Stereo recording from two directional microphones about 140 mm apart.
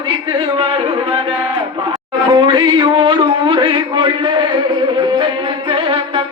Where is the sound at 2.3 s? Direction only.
35° right (ahead or behind).